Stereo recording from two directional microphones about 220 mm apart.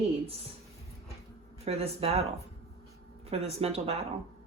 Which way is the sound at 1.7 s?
30° right (ahead or behind).